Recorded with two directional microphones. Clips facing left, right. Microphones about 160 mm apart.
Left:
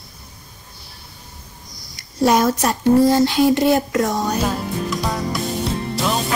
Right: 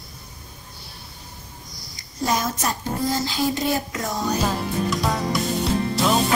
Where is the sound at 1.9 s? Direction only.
70° left (ahead or behind).